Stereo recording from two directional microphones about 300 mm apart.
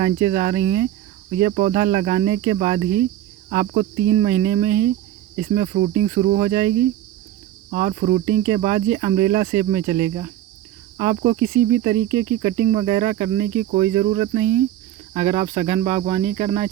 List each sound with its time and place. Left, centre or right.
0.0 s cricket: centre